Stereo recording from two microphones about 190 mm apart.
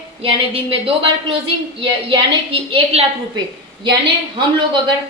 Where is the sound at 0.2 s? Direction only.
30° right (ahead or behind).